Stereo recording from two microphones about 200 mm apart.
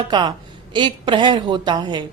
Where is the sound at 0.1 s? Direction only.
20° right (ahead or behind).